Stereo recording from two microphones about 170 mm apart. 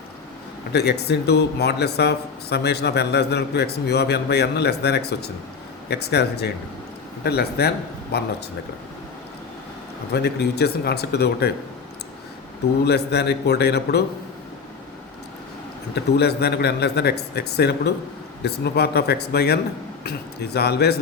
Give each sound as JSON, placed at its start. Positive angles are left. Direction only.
{"t": 0.7, "sound": "speech", "side_deg": 75}
{"t": 10.1, "sound": "speech", "side_deg": 75}
{"t": 12.8, "sound": "speech", "side_deg": 75}
{"t": 16.1, "sound": "speech", "side_deg": 75}